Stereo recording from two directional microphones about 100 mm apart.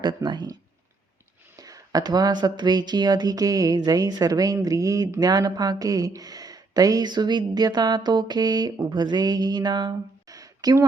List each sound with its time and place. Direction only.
0.0 s speech: 45° right (ahead or behind)
1.5 s speech: 35° right (ahead or behind)